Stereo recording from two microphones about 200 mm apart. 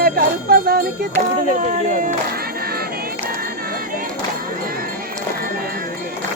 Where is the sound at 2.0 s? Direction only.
45° right (ahead or behind).